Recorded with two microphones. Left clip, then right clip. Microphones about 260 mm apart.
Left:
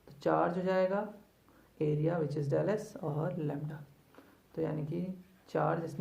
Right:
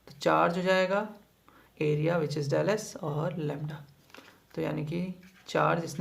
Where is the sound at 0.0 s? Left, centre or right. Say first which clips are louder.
Right 5 dB; right.